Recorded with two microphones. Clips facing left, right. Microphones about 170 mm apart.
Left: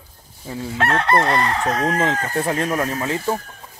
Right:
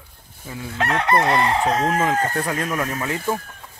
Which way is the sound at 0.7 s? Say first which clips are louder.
Left 1 dB; 15° right (ahead or behind).